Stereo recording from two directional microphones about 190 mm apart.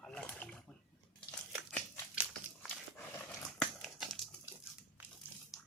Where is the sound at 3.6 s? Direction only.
Centre (ahead or behind).